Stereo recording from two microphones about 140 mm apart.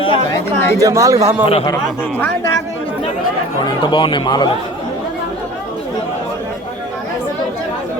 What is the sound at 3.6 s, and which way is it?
Speech, 35° left (ahead or behind).